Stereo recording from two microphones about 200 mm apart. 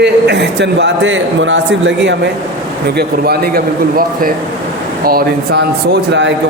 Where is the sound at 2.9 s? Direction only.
50° right (ahead or behind).